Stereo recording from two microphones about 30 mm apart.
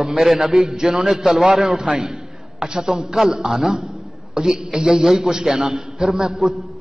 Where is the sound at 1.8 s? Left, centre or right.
Right.